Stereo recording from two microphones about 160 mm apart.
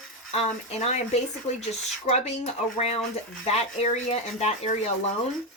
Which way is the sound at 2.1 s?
40° left (ahead or behind).